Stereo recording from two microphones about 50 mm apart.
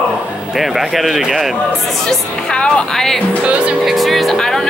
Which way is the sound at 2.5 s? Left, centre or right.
Centre.